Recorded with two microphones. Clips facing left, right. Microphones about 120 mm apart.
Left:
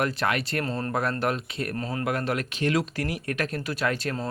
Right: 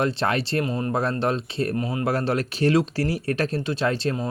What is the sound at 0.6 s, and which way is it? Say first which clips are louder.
Speech: right 4 dB; 15° right (ahead or behind).